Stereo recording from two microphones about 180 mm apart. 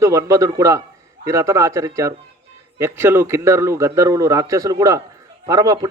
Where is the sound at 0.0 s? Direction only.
15° right (ahead or behind).